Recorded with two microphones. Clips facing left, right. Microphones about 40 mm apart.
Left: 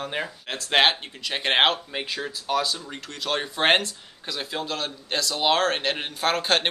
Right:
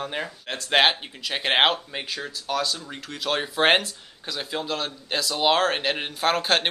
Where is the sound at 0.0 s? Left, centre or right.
Centre.